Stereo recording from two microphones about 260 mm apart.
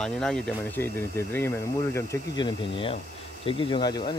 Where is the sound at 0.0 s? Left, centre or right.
Centre.